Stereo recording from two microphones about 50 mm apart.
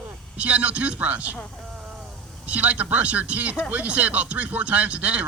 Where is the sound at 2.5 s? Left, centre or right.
Right.